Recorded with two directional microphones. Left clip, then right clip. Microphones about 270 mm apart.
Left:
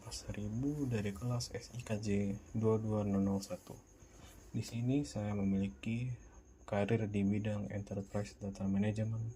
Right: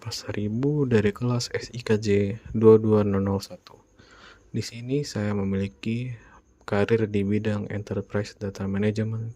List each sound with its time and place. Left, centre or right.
0.1 s speech: right
4.5 s speech: right